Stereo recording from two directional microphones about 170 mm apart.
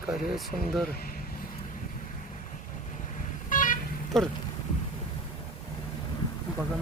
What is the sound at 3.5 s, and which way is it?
Vehicle, 50° left (ahead or behind).